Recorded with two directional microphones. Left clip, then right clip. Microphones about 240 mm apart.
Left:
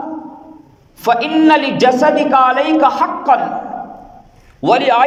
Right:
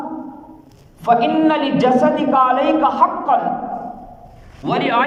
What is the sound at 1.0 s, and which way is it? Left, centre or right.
A man's voice, left.